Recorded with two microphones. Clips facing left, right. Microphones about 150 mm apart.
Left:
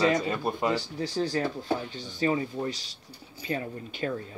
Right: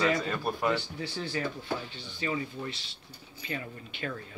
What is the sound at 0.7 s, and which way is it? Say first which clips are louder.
Speech: left 6 dB; 35° left (ahead or behind).